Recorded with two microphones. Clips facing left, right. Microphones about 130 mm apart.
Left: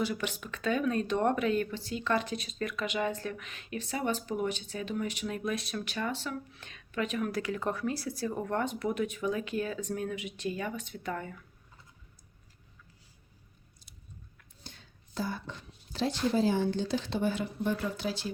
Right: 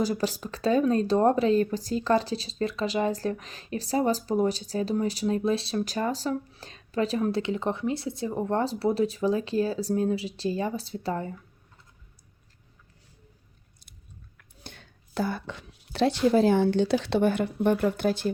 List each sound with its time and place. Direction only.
0.0 s speech: 35° right (ahead or behind)
14.6 s a woman's voice: 65° right (ahead or behind)